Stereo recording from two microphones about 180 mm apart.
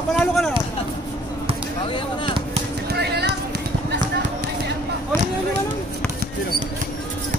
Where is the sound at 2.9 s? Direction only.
65° right (ahead or behind).